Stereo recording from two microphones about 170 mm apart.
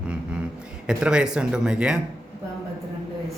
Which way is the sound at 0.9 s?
5° right (ahead or behind).